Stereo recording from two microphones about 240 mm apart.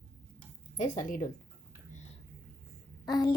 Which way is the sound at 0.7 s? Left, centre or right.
Left.